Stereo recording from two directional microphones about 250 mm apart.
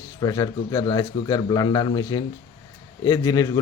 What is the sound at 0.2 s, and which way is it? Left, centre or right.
A man's voice, centre.